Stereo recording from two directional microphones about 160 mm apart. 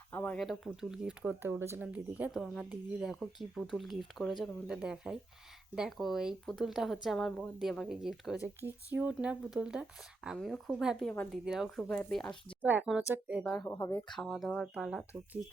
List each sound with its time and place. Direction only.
0.1 s speech: 10° left (ahead or behind)
12.6 s speech: 5° right (ahead or behind)
13.4 s speech: 5° left (ahead or behind)
14.1 s speech: centre (ahead or behind)